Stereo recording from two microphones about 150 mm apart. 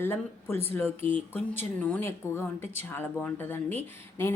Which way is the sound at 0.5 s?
15° left (ahead or behind).